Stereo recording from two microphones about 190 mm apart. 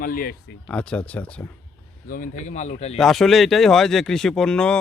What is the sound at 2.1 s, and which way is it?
Speech, 45° left (ahead or behind).